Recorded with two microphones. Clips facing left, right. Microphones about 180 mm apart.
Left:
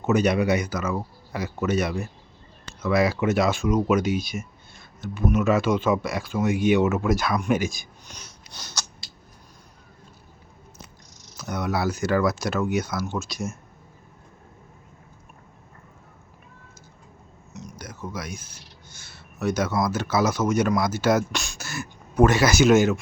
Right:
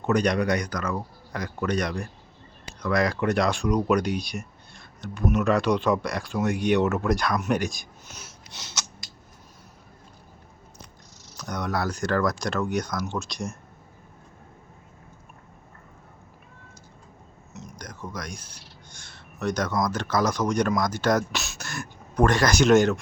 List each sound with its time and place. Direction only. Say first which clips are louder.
0.0 s speech: left 2 dB; 5° left (ahead or behind)
8.5 s a sound: left 1 dB; 20° right (ahead or behind)
11.3 s speech: left 2 dB; 5° left (ahead or behind)
17.5 s speech: left 2 dB; centre (ahead or behind)